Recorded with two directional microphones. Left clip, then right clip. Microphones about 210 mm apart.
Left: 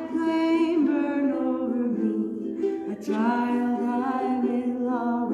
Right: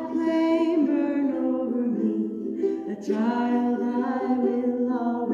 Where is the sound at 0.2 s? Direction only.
30° left (ahead or behind).